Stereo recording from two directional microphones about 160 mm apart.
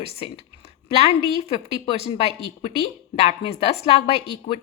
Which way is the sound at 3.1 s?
40° left (ahead or behind).